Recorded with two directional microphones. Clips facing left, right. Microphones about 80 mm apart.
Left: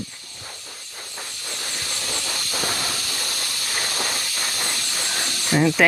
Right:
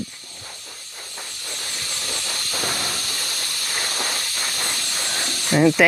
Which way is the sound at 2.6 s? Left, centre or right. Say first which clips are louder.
Even; centre.